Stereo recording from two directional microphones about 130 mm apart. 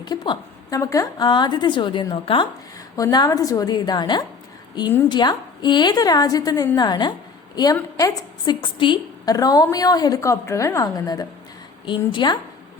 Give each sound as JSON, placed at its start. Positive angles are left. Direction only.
{"t": 0.0, "sound": "a woman's voice", "side_deg": 35}
{"t": 2.9, "sound": "a woman's voice", "side_deg": 30}